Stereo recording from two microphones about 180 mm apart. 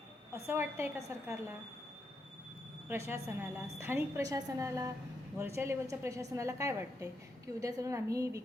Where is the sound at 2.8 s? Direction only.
15° right (ahead or behind).